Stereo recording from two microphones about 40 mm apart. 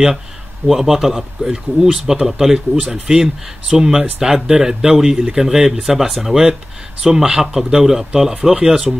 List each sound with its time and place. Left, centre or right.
0.7 s speech: centre